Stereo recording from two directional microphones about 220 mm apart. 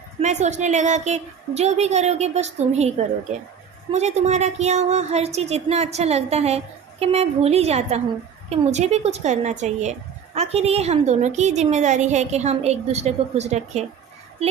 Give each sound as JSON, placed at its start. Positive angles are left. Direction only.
{"t": 0.2, "sound": "a woman's voice", "side_deg": -30}
{"t": 3.9, "sound": "a woman's voice", "side_deg": -30}